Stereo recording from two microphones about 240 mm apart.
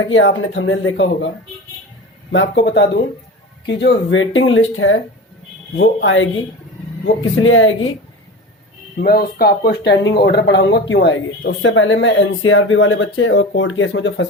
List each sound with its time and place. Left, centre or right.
0.1 s speech: left
2.3 s speech: left
9.0 s speech: left